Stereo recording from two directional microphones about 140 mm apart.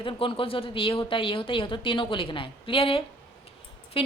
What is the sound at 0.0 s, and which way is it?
Speech, 35° left (ahead or behind).